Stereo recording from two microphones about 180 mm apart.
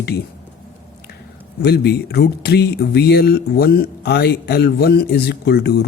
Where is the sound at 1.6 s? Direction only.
65° left (ahead or behind).